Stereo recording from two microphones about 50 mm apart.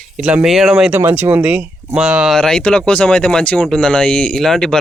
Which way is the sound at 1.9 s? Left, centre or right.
Centre.